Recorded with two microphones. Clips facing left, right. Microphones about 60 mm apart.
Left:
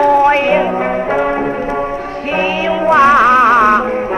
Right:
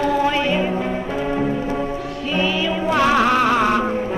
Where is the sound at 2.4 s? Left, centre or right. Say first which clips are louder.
Left 6 dB; left.